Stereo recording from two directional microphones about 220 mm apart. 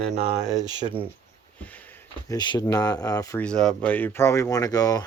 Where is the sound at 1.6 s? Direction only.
5° left (ahead or behind).